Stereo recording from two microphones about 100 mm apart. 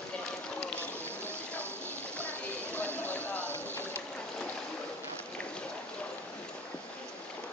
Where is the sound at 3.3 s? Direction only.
25° right (ahead or behind).